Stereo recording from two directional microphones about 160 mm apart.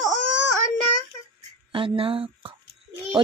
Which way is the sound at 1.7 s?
35° right (ahead or behind).